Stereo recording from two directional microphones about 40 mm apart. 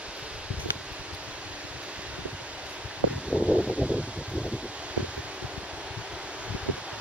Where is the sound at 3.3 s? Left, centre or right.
Right.